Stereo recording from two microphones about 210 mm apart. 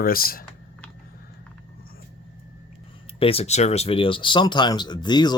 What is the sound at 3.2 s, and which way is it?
Speech, 25° left (ahead or behind).